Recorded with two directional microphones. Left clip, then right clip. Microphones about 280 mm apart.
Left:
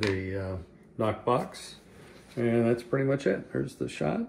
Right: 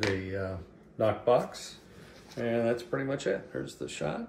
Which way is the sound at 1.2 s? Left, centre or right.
Left.